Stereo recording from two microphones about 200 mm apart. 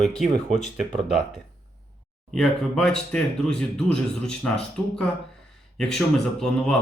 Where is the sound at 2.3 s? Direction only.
5° left (ahead or behind).